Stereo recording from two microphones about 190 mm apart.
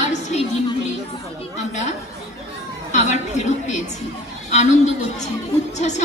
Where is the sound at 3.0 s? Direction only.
40° left (ahead or behind).